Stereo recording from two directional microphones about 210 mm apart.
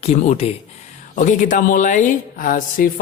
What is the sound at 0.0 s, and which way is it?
Speech, 30° left (ahead or behind).